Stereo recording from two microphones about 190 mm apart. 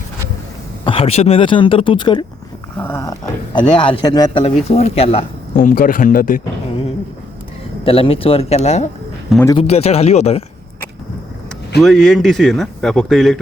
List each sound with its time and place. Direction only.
0.9 s a man's voice: 30° left (ahead or behind)
2.7 s a man's voice: 10° left (ahead or behind)
4.4 s speech: 30° left (ahead or behind)
7.9 s speech: 30° left (ahead or behind)
11.8 s speech: centre (ahead or behind)